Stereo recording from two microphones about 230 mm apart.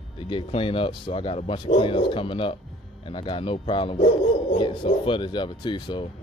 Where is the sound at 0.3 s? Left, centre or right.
Left.